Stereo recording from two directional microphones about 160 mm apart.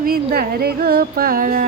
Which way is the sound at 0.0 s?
70° right (ahead or behind).